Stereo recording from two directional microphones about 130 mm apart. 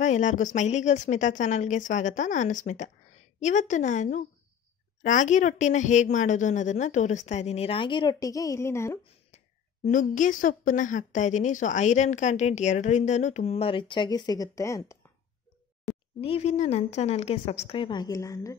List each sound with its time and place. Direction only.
0.0 s a woman's voice: 70° left (ahead or behind); by 9.0 s 20° left (ahead or behind)
9.8 s a woman's voice: 75° left (ahead or behind); by 15.0 s 20° left (ahead or behind)
16.2 s a woman's voice: 45° left (ahead or behind); by 18.6 s 25° left (ahead or behind)